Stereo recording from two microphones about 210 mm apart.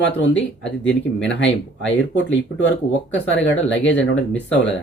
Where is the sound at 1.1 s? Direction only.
60° left (ahead or behind).